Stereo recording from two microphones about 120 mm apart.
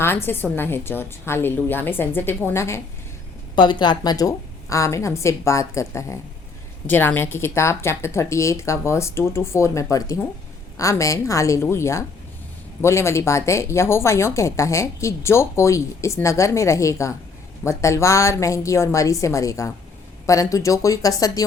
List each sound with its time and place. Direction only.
0.5 s a woman's voice: 20° left (ahead or behind)
3.5 s a woman's voice: 40° left (ahead or behind)